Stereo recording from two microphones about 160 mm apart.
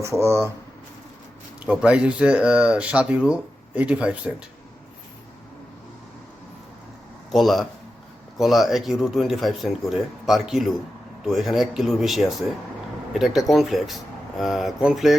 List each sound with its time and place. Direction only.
0.0 s speech: 15° right (ahead or behind)
1.6 s speech: 5° right (ahead or behind)
7.3 s speech: centre (ahead or behind)